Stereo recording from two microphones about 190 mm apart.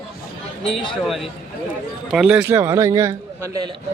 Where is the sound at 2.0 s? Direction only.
5° right (ahead or behind).